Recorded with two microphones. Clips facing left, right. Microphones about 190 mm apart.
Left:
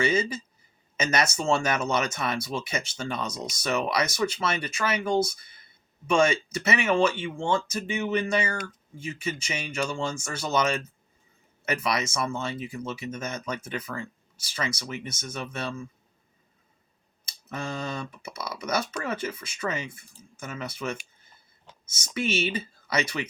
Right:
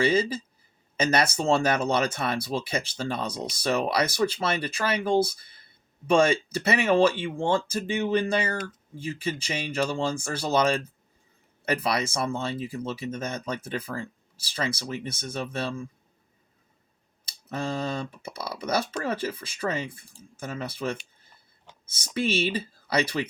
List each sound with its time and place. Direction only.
0.0 s speech: 30° right (ahead or behind)
17.2 s speech: 30° right (ahead or behind)